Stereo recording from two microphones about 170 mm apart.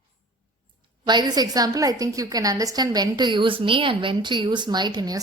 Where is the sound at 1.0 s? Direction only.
25° right (ahead or behind).